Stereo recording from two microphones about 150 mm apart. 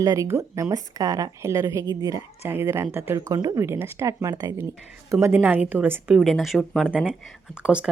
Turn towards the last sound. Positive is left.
turn(degrees=-5)  # may be behind; listen again after turning